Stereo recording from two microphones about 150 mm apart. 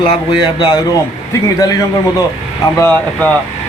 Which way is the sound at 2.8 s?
10° left (ahead or behind).